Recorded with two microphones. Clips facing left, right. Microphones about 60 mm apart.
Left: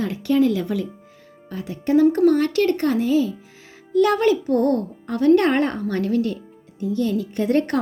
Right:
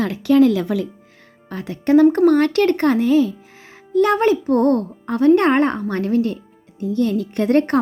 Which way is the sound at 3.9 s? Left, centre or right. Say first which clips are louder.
Right 2 dB; right.